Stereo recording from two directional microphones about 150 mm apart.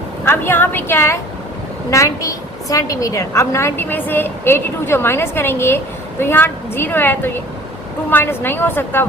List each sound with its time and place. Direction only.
0.3 s a woman's voice: 15° left (ahead or behind)